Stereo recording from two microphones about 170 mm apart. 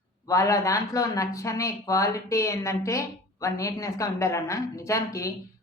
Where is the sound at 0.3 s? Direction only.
20° left (ahead or behind).